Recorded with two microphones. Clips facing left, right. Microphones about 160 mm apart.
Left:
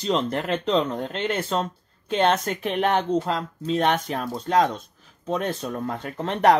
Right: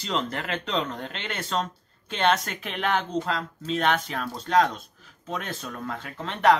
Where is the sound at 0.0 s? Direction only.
35° left (ahead or behind).